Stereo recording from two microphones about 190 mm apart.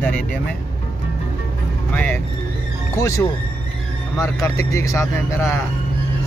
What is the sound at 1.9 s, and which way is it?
Speech, 10° left (ahead or behind).